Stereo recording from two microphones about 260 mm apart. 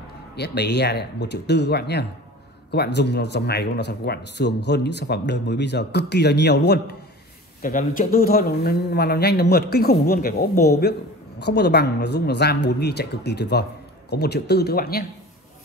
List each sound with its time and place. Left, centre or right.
0.4 s speech: left